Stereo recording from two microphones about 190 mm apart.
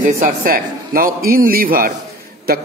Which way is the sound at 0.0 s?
45° right (ahead or behind).